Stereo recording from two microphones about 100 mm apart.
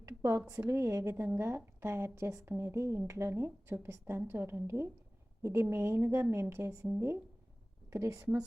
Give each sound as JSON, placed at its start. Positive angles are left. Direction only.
{"t": 0.0, "sound": "a sound", "side_deg": -25}
{"t": 0.7, "sound": "speech", "side_deg": -30}
{"t": 7.9, "sound": "a woman's voice", "side_deg": -30}